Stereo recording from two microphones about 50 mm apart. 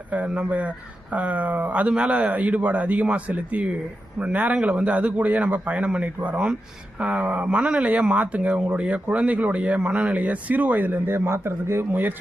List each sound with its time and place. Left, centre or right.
0.3 s speech: right
4.5 s speech: centre; by 11.9 s right
11.9 s speech: right